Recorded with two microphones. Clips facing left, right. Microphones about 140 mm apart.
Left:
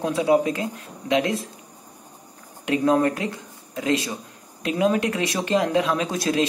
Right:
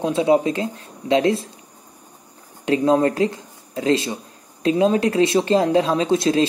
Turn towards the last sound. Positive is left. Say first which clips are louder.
# right 5 dB
turn(degrees=-30)  # may be behind; listen again after turning